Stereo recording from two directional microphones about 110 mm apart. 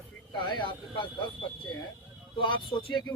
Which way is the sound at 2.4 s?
45° left (ahead or behind).